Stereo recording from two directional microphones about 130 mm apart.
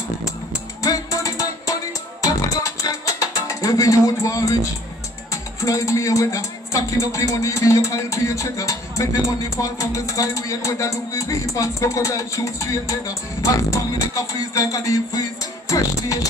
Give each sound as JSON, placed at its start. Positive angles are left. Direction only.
{"t": 0.8, "sound": "music", "side_deg": 25}